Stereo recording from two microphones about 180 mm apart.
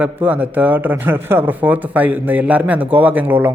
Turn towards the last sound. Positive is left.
turn(degrees=-10)  # may be behind; listen again after turning